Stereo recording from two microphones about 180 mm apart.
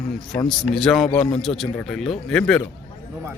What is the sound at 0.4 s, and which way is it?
Speech, 5° left (ahead or behind).